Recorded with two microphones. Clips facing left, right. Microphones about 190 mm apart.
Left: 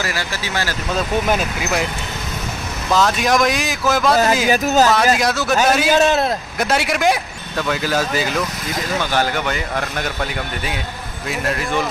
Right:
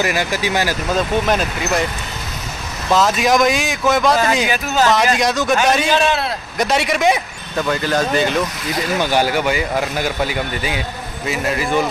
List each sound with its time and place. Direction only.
0.0 s speech: 15° right (ahead or behind)
1.2 s speech: 5° left (ahead or behind)
2.9 s speech: centre (ahead or behind)
5.9 s a man's voice: 45° left (ahead or behind)
6.6 s speech: centre (ahead or behind)
9.0 s speech: 15° right (ahead or behind)